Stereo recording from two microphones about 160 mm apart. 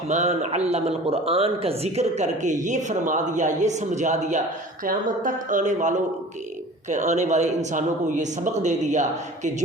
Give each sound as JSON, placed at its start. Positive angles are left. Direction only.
{"t": 0.1, "sound": "a man's voice", "side_deg": -45}